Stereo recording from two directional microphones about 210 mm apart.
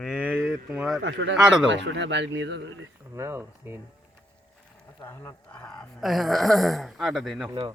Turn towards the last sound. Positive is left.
turn(degrees=0)  # may be behind; listen again after turning